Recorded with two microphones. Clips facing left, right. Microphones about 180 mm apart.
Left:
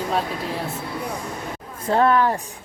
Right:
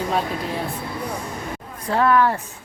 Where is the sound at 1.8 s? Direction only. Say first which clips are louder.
Even; 25° left (ahead or behind).